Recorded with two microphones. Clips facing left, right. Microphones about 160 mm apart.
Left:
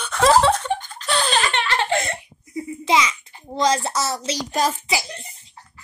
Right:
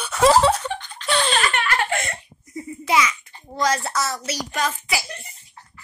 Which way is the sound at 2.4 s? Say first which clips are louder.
Left 4 dB; centre (ahead or behind).